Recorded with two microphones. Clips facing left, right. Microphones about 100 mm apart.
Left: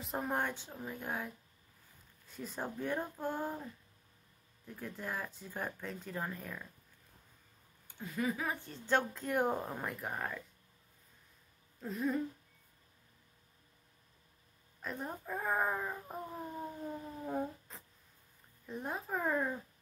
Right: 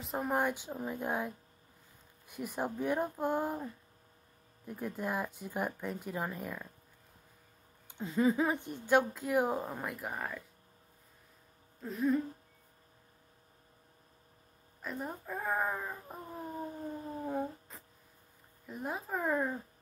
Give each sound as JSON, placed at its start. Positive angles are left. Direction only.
{"t": 0.0, "sound": "speech", "side_deg": 0}
{"t": 4.6, "sound": "speech", "side_deg": -15}
{"t": 7.9, "sound": "speech", "side_deg": -25}
{"t": 11.8, "sound": "speech", "side_deg": 0}
{"t": 14.8, "sound": "speech", "side_deg": 0}
{"t": 16.4, "sound": "a sound", "side_deg": -35}
{"t": 17.3, "sound": "cat", "side_deg": 0}
{"t": 18.7, "sound": "speech", "side_deg": 0}